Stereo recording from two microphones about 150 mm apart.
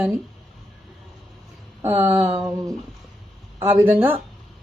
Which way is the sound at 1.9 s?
15° right (ahead or behind).